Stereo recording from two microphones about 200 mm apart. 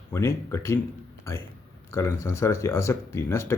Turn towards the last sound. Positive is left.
turn(degrees=15)  # may be behind; listen again after turning